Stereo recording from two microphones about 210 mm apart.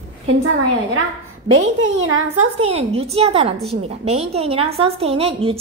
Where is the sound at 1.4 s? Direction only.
90° right.